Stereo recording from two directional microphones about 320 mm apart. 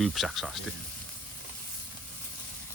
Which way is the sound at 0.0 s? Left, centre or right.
Centre.